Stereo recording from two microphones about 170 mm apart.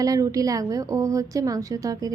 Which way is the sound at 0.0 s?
20° right (ahead or behind).